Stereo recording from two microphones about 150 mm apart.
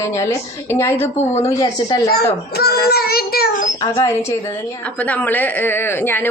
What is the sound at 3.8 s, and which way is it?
A woman's voice, 20° left (ahead or behind).